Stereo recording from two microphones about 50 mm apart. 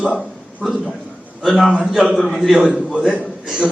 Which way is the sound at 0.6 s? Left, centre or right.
Centre.